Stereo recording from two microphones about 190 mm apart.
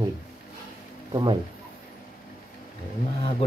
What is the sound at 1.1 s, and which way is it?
Speech, 25° right (ahead or behind).